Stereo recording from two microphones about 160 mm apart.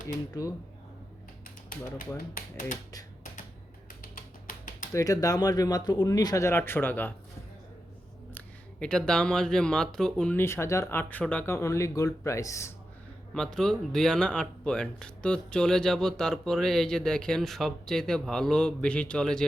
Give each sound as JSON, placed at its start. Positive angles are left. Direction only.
{"t": 0.4, "sound": "speech", "side_deg": 20}
{"t": 2.3, "sound": "speech", "side_deg": 55}
{"t": 4.0, "sound": "music", "side_deg": 60}
{"t": 4.9, "sound": "speech", "side_deg": 20}
{"t": 8.3, "sound": "speech", "side_deg": 10}
{"t": 13.3, "sound": "speech", "side_deg": 5}